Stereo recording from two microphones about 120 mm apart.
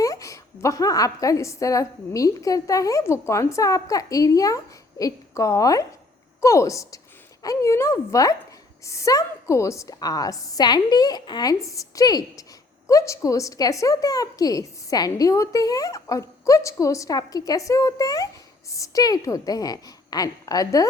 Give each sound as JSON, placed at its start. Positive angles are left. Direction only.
{"t": 0.0, "sound": "a woman's voice", "side_deg": 25}